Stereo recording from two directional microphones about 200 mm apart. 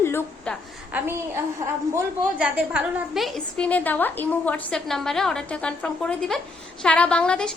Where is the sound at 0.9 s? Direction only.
10° right (ahead or behind).